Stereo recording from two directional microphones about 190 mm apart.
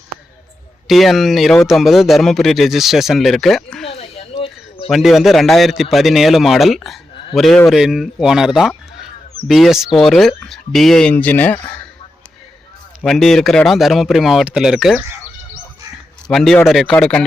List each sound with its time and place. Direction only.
0.9 s speech: centre (ahead or behind)
3.8 s a sound: 30° left (ahead or behind)
4.9 s speech: centre (ahead or behind)
13.0 s speech: centre (ahead or behind)
16.2 s speech: centre (ahead or behind)